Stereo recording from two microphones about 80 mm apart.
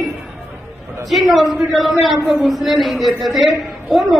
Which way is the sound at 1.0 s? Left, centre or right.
Centre.